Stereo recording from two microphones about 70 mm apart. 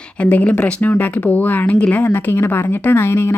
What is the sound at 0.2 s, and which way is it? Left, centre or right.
A woman's voice, left.